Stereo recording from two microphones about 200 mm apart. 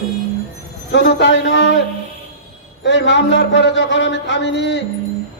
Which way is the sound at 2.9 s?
60° left (ahead or behind).